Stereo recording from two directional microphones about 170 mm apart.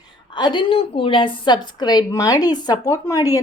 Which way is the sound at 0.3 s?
25° left (ahead or behind).